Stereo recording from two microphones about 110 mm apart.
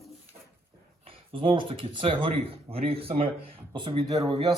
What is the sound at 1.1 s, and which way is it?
Speech, 55° right (ahead or behind).